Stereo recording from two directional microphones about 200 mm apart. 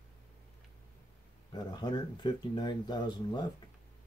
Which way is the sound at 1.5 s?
20° left (ahead or behind).